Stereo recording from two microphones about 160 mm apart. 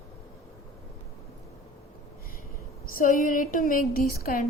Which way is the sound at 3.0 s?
55° left (ahead or behind).